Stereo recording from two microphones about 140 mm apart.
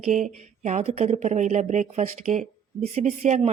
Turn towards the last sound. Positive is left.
turn(degrees=-55)  # may be behind; listen again after turning